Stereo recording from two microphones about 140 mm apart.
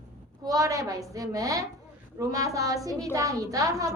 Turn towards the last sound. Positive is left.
turn(degrees=-25)  # may be behind; listen again after turning